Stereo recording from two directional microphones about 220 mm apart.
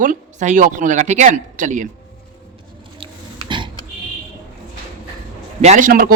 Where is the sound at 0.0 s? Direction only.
35° right (ahead or behind).